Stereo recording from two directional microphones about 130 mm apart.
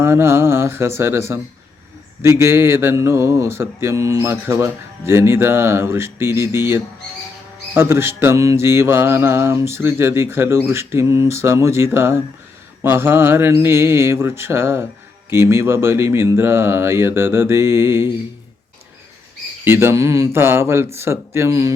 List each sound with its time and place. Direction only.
0.0 s mantra: 20° right (ahead or behind)
19.6 s mantra: 20° right (ahead or behind)